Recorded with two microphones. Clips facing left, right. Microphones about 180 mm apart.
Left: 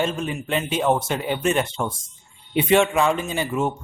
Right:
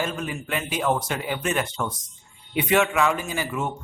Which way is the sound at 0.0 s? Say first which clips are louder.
Left 4 dB; 25° left (ahead or behind).